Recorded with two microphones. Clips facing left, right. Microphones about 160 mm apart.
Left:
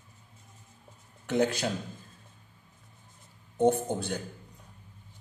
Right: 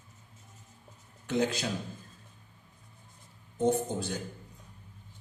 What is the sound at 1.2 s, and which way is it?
Speech, 55° left (ahead or behind).